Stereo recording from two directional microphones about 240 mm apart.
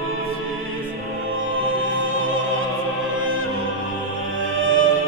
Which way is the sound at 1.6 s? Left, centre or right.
Right.